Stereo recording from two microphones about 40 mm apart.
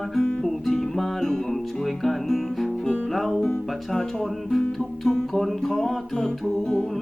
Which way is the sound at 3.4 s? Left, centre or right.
Centre.